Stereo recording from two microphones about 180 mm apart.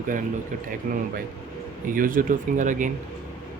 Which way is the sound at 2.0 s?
50° right (ahead or behind).